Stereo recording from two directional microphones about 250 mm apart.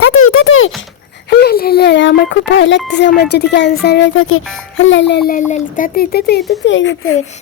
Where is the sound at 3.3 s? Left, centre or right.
Left.